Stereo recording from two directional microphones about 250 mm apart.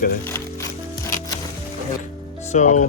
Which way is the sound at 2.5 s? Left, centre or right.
Left.